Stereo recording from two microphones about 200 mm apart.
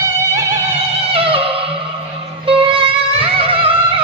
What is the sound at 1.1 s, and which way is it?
Music, 25° right (ahead or behind).